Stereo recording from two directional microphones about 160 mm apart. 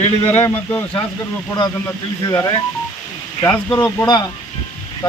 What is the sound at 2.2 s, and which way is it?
Speech, 20° left (ahead or behind).